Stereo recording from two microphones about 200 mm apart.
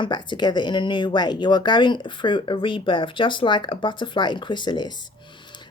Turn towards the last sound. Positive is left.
turn(degrees=25)  # may be behind; listen again after turning